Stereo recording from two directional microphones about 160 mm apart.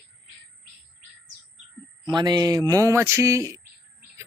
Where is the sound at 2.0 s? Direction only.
25° right (ahead or behind).